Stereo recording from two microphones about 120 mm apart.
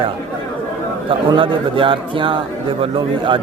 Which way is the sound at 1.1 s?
45° right (ahead or behind).